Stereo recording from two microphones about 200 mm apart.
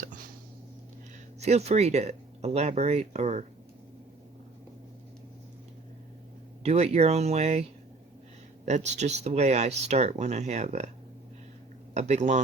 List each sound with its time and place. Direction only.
1.4 s speech: 35° right (ahead or behind)
6.6 s speech: 30° right (ahead or behind)
11.9 s speech: 35° right (ahead or behind)